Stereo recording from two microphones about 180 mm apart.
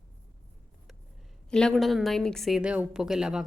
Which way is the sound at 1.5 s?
5° left (ahead or behind).